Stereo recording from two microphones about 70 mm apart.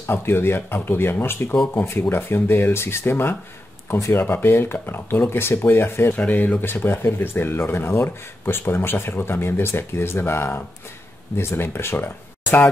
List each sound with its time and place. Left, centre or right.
0.0 s speech: left